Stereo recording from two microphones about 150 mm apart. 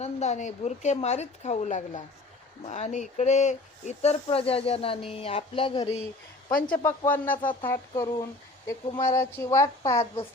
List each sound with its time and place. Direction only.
0.0 s a woman's voice: 50° left (ahead or behind)
6.7 s speech: 10° left (ahead or behind)